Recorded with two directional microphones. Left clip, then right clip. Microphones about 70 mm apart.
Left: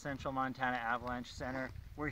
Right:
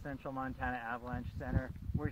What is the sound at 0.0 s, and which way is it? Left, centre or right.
Speech, right.